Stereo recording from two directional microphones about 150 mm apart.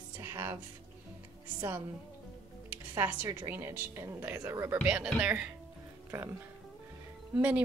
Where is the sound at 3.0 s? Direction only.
10° right (ahead or behind).